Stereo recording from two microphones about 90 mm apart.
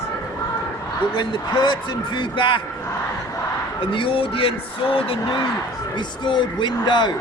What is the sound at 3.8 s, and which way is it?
Speech, 75° left (ahead or behind).